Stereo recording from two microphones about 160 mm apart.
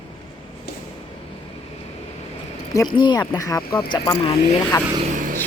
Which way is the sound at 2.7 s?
25° left (ahead or behind).